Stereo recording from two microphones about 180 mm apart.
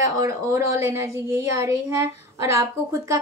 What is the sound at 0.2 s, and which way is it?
A woman's voice, 15° right (ahead or behind).